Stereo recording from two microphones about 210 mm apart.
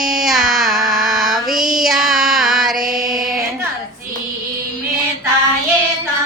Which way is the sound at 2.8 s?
40° right (ahead or behind).